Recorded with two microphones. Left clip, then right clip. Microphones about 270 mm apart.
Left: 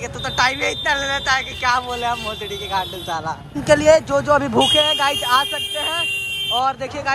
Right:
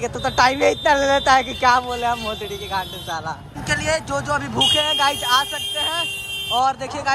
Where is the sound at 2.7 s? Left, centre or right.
Centre.